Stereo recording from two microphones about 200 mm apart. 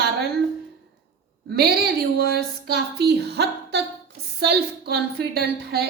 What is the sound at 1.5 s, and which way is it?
A woman's voice, 55° right (ahead or behind).